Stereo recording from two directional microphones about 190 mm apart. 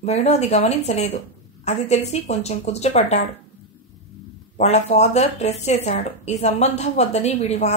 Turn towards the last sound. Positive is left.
turn(degrees=35)  # may be behind; listen again after turning